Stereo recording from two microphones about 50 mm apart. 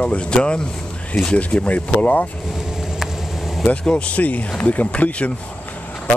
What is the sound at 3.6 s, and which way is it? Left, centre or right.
Speech, left.